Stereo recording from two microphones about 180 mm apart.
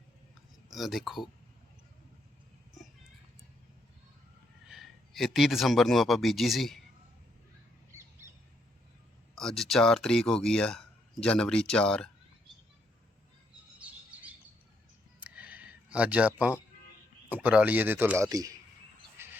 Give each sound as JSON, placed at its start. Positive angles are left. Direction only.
{"t": 0.7, "sound": "speech", "side_deg": 0}
{"t": 4.7, "sound": "speech", "side_deg": 0}
{"t": 7.9, "sound": "bird", "side_deg": -20}
{"t": 9.3, "sound": "speech", "side_deg": 0}
{"t": 13.7, "sound": "bird", "side_deg": -10}
{"t": 15.2, "sound": "a sound", "side_deg": -10}
{"t": 17.2, "sound": "a man's voice", "side_deg": -10}
{"t": 19.1, "sound": "a sound", "side_deg": -15}